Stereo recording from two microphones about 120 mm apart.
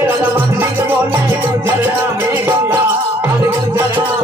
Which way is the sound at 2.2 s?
20° right (ahead or behind).